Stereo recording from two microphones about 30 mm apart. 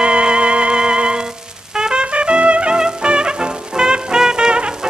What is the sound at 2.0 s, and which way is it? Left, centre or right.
Trumpet, right.